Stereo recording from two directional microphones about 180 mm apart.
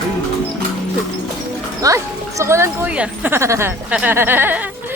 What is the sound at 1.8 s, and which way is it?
Speech, 15° right (ahead or behind).